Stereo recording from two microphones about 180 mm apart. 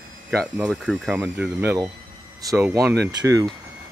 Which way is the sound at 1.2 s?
15° right (ahead or behind).